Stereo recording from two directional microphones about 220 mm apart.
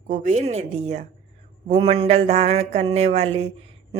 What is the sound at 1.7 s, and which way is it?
Mantra, 30° right (ahead or behind).